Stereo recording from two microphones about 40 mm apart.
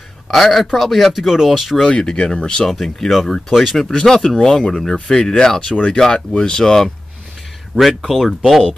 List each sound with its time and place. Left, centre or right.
0.3 s speech: centre
2.0 s speech: centre
2.6 s speech: centre
8.1 s speech: centre